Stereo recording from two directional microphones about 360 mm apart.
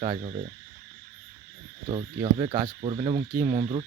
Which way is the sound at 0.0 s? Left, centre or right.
Centre.